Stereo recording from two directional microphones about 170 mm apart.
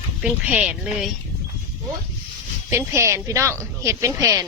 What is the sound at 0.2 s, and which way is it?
Speech, 5° right (ahead or behind).